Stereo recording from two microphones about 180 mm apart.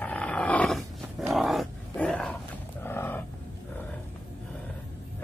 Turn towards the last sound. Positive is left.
turn(degrees=10)  # may be behind; listen again after turning